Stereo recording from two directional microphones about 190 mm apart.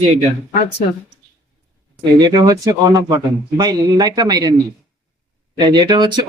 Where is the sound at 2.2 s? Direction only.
20° right (ahead or behind).